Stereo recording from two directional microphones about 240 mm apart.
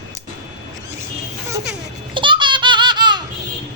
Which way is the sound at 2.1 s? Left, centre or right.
Centre.